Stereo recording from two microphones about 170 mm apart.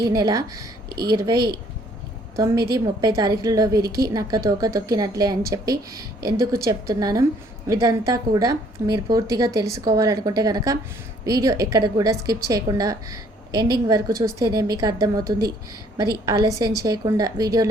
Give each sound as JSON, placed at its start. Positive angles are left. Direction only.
{"t": 0.0, "sound": "a woman's voice", "side_deg": -20}
{"t": 0.9, "sound": "speech", "side_deg": -70}
{"t": 1.1, "sound": "a woman's voice", "side_deg": -20}